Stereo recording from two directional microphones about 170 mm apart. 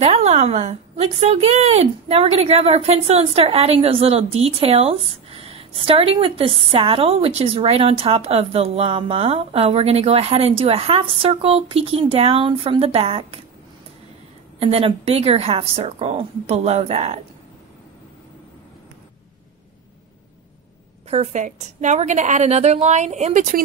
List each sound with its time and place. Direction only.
0.0 s a woman's voice: 40° right (ahead or behind)
14.6 s a woman's voice: 35° right (ahead or behind)
21.1 s a woman's voice: 45° right (ahead or behind)